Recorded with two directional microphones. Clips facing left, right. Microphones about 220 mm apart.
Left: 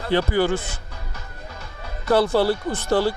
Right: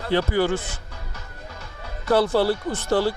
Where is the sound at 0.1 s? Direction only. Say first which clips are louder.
Left 1 dB; 15° left (ahead or behind).